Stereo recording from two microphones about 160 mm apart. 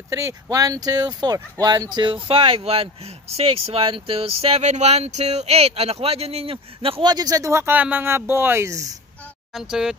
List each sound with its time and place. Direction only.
0.1 s speech: 20° right (ahead or behind)
9.5 s speech: centre (ahead or behind)